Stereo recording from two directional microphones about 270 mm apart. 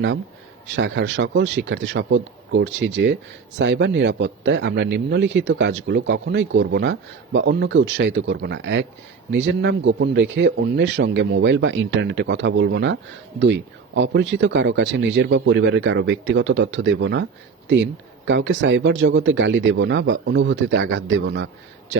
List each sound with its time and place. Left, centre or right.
0.8 s a man's voice: right
18.3 s speech: right